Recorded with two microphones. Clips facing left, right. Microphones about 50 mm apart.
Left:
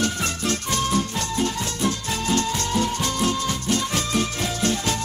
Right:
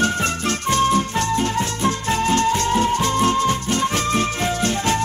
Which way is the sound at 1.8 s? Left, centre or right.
Right.